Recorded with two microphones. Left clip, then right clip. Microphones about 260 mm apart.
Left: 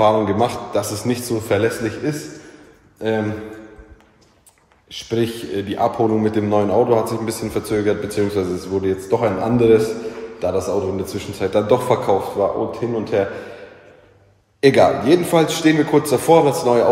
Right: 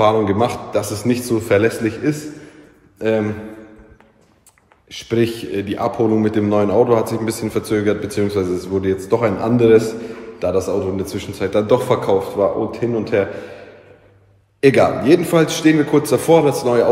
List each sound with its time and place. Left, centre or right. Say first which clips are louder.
0.0 s a man's voice: right 1 dB; centre
4.8 s a man's voice: right 3 dB; centre
14.6 s a man's voice: even; centre